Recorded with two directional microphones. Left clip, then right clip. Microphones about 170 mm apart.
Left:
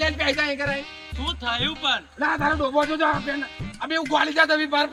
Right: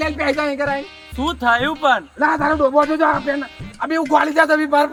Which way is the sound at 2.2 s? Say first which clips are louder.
Right 6 dB; 15° left (ahead or behind).